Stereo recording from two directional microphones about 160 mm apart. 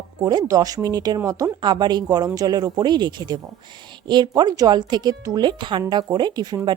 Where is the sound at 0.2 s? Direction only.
25° right (ahead or behind).